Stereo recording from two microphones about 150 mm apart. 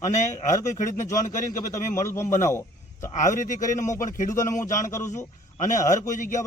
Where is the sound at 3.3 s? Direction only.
55° left (ahead or behind).